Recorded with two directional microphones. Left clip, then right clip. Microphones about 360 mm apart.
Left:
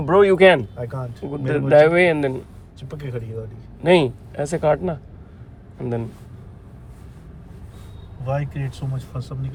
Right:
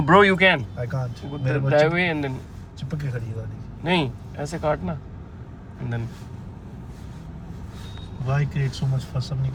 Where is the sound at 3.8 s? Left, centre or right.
Centre.